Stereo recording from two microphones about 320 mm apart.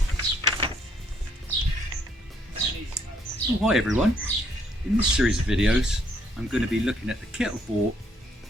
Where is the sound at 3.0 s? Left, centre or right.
Centre.